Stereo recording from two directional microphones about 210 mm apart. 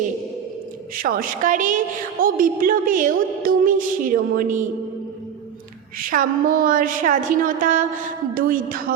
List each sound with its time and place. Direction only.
0.9 s a woman's voice: 40° right (ahead or behind)
6.0 s a woman's voice: 40° right (ahead or behind)